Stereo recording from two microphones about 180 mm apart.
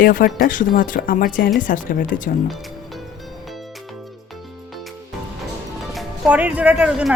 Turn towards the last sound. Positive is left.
turn(degrees=-5)  # may be behind; listen again after turning